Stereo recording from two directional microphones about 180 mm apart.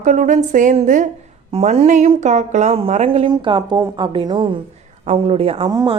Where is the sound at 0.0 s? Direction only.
45° right (ahead or behind).